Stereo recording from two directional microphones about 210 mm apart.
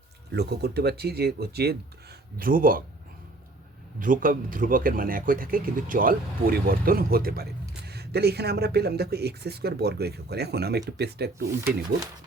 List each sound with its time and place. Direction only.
0.3 s speech: 50° right (ahead or behind)
4.0 s speech: 40° right (ahead or behind)